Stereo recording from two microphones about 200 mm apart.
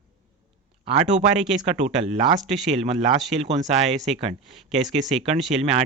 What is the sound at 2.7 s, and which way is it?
Speech, 30° right (ahead or behind).